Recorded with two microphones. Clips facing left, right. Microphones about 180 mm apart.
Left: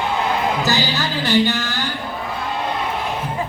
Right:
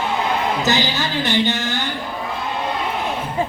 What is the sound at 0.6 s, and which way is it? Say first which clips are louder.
Music: right 1 dB; 20° right (ahead or behind).